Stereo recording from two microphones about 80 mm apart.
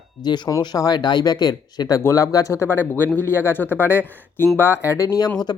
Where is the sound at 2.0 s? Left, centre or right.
Left.